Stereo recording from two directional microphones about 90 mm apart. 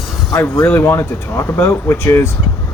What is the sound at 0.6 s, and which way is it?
Speech, 25° left (ahead or behind).